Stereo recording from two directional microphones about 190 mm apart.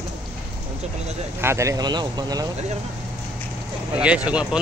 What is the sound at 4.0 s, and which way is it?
Speech, 5° right (ahead or behind).